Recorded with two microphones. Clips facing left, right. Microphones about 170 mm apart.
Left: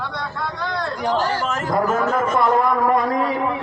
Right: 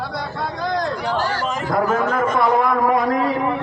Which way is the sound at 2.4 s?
10° right (ahead or behind).